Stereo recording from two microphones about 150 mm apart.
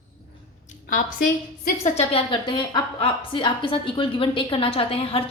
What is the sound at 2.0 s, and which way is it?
A woman's voice, 40° left (ahead or behind).